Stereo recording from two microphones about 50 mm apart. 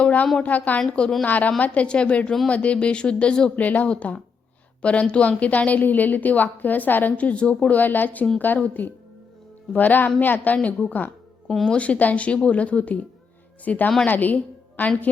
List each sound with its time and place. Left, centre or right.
0.0 s a sound: left
0.4 s speech: left
0.8 s a woman's voice: centre
1.2 s a woman's voice: left
3.5 s a woman's voice: left
7.7 s a woman's voice: left
11.4 s speech: centre
11.8 s a woman's voice: left